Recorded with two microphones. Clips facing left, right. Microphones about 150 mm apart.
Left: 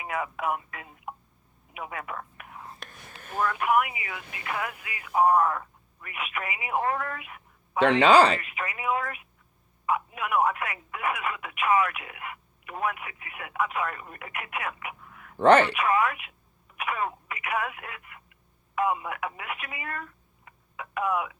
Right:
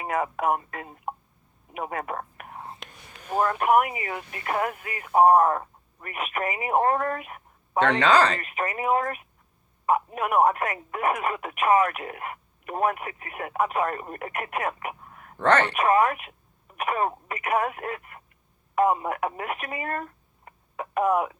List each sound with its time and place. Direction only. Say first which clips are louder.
0.0 s speech: right 5 dB; 45° right (ahead or behind)
1.7 s whispering: right 5 dB; 45° right (ahead or behind)
3.2 s speech: right 4 dB; 40° right (ahead or behind)
7.9 s speech: left 3 dB; 10° left (ahead or behind)
8.4 s speech: right 6 dB; 45° right (ahead or behind)